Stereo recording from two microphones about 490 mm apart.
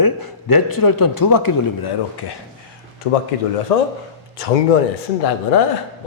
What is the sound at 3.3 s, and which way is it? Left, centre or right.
Speech, left.